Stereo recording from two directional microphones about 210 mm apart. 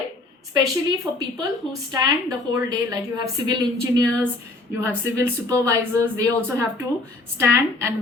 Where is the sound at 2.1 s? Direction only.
15° right (ahead or behind).